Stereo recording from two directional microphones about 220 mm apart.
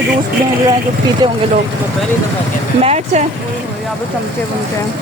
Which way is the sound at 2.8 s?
30° right (ahead or behind).